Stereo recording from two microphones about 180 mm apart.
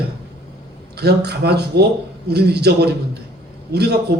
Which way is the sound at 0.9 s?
65° right (ahead or behind).